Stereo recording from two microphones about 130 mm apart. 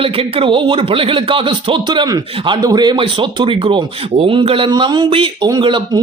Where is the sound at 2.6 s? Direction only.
35° right (ahead or behind).